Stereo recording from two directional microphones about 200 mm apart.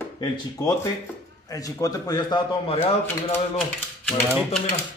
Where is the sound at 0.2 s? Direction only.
20° left (ahead or behind).